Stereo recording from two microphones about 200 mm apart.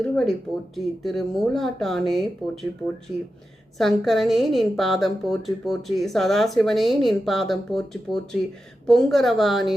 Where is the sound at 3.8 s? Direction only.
Centre (ahead or behind).